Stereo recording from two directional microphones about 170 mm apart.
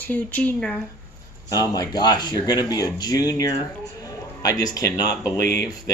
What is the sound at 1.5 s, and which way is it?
Speech, 20° left (ahead or behind).